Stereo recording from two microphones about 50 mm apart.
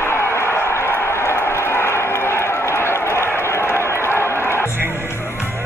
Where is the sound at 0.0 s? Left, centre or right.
Left.